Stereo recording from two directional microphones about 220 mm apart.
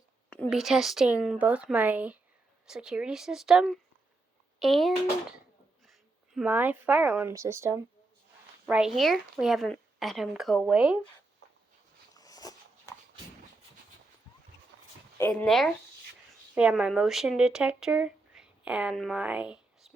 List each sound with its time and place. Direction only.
0.3 s a woman's voice: 5° left (ahead or behind)
12.1 s a sound: 15° left (ahead or behind)
14.7 s dog: 50° right (ahead or behind)
15.2 s a woman's voice: 5° left (ahead or behind)